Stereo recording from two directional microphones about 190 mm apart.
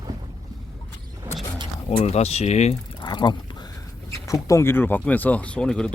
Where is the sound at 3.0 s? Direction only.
20° left (ahead or behind).